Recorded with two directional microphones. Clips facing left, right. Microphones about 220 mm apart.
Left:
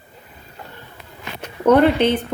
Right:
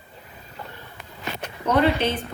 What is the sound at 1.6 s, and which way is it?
Speech, 55° left (ahead or behind).